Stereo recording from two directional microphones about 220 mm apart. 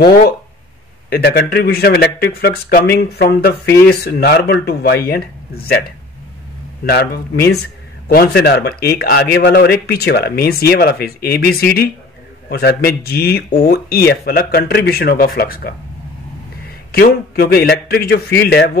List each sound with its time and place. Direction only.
1.1 s speech: 45° left (ahead or behind)
16.9 s speech: 45° left (ahead or behind)